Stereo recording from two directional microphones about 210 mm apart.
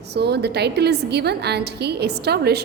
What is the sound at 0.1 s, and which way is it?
A woman's voice, 50° right (ahead or behind).